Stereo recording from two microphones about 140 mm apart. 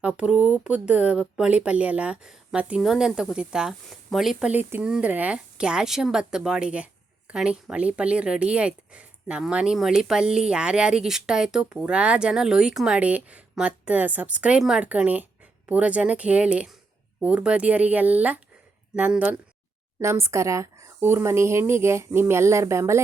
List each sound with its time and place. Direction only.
0.0 s speech: 10° right (ahead or behind)